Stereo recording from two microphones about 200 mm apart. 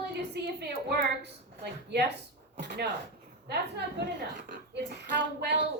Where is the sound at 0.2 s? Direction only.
55° right (ahead or behind).